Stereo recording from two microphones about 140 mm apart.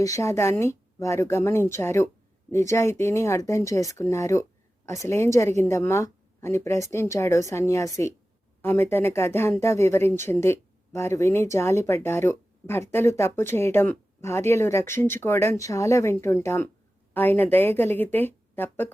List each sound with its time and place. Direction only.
0.0 s speech: 20° left (ahead or behind)